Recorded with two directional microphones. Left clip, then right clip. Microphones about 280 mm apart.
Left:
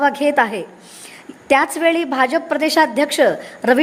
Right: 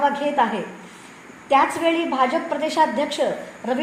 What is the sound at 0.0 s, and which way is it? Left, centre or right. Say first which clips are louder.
A woman's voice: left 4 dB; left.